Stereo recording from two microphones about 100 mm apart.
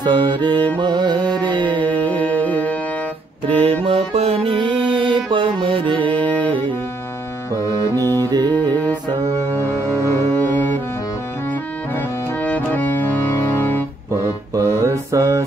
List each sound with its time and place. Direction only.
0.0 s music: 50° right (ahead or behind)
1.8 s music: 15° left (ahead or behind)
3.8 s music: 80° right
4.5 s music: 55° right (ahead or behind)
6.3 s music: 15° left (ahead or behind)
8.0 s music: 25° left (ahead or behind)
8.3 s music: 45° right (ahead or behind)
9.8 s music: 25° left (ahead or behind)
12.4 s organ: 15° left (ahead or behind)
14.2 s mantra: 25° right (ahead or behind)